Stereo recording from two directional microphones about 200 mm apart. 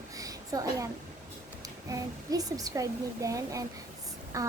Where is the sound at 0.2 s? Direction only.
15° right (ahead or behind).